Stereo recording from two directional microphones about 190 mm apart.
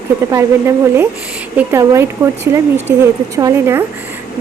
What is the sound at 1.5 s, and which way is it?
Speech, 15° right (ahead or behind).